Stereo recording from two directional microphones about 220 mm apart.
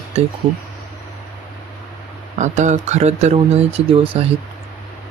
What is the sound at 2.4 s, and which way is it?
Speech, 35° right (ahead or behind).